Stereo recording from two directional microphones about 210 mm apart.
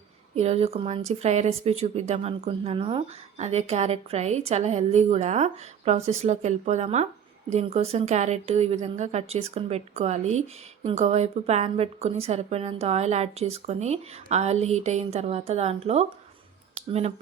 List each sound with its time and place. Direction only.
0.3 s speech: 30° right (ahead or behind)